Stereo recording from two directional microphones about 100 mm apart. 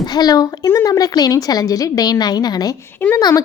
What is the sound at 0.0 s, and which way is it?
A woman's voice, 45° left (ahead or behind).